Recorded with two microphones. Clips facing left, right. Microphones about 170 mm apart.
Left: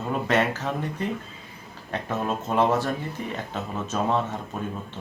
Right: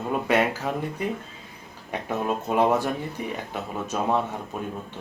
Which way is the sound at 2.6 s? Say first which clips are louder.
Even; 15° right (ahead or behind).